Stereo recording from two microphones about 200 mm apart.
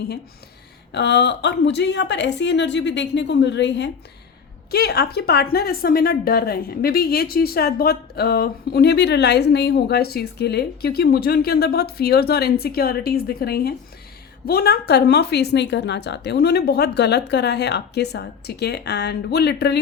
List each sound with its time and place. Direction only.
0.9 s a woman's voice: 60° left (ahead or behind)